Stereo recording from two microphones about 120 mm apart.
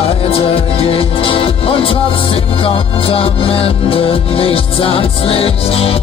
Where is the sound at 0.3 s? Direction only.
50° left (ahead or behind).